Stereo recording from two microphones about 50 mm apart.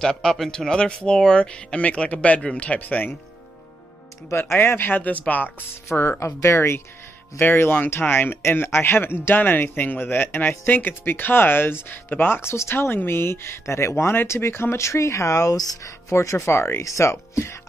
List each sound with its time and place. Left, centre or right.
0.0 s speech: centre; by 3.1 s left
4.6 s speech: left
5.9 s speech: left
6.2 s speech: left
7.4 s speech: left
8.4 s speech: left
10.7 s speech: left
12.4 s speech: left
16.5 s speech: left
16.8 s speech: left